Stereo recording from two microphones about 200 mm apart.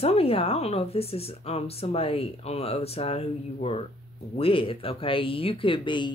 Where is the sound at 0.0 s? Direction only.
30° left (ahead or behind).